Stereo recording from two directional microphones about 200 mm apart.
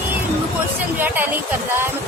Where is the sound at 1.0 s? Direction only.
10° right (ahead or behind).